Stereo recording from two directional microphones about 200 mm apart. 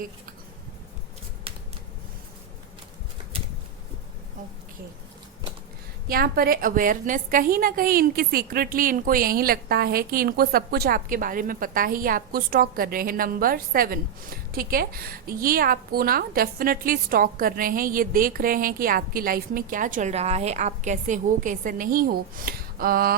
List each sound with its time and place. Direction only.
1.5 s shuffling cards: 30° right (ahead or behind)
3.3 s a sound: 30° right (ahead or behind)
6.1 s a woman's voice: 50° right (ahead or behind)